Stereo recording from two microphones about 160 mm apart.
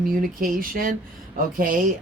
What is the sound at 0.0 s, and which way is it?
Speech, 65° right (ahead or behind).